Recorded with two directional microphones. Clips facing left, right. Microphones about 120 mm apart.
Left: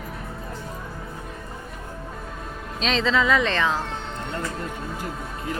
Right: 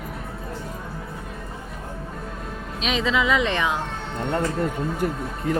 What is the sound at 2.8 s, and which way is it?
Speech, 10° right (ahead or behind).